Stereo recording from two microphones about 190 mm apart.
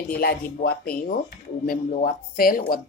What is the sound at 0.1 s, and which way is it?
Speech, 55° left (ahead or behind).